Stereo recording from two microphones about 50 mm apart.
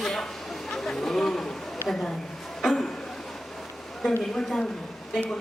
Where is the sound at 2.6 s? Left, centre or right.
Centre.